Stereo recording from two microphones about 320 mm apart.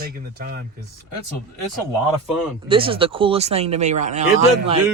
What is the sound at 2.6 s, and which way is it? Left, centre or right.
Speech, centre.